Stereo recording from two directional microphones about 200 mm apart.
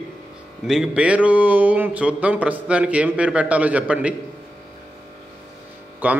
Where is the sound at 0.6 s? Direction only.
Centre (ahead or behind).